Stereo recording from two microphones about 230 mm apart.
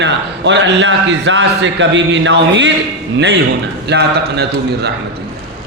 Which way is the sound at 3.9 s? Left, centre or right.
Right.